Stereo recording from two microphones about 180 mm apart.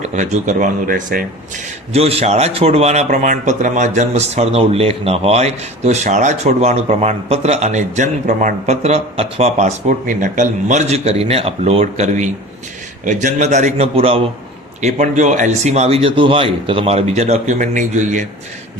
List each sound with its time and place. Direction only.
0.0 s speech: 40° right (ahead or behind)
1.9 s speech: 35° right (ahead or behind)